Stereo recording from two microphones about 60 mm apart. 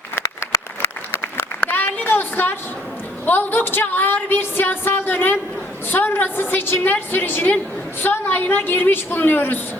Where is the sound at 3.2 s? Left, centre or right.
Left.